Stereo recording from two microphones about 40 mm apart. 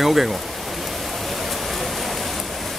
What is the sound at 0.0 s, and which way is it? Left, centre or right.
Speech, centre.